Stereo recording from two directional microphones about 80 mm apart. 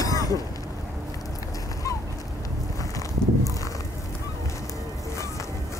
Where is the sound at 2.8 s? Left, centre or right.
Left.